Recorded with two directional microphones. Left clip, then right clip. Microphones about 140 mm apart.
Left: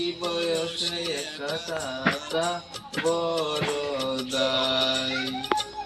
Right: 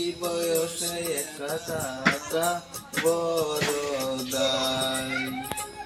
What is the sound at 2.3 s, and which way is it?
Music, centre (ahead or behind).